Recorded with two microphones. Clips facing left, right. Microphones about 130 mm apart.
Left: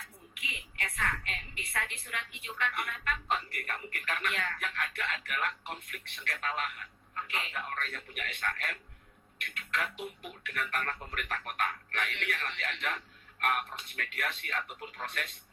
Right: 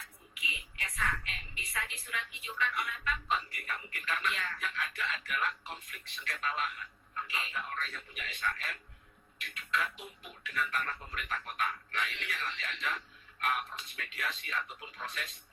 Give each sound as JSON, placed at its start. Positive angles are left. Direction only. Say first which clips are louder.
{"t": 0.3, "sound": "a woman's voice", "louder": "left 2 dB", "side_deg": 60}